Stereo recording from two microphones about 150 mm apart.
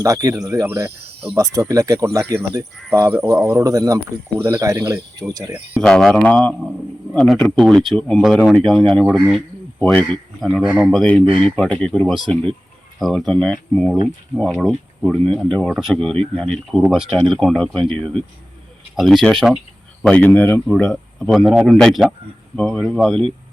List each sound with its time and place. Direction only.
0.0 s speech: 20° right (ahead or behind)
5.8 s speech: 5° left (ahead or behind)
9.8 s speech: 10° left (ahead or behind)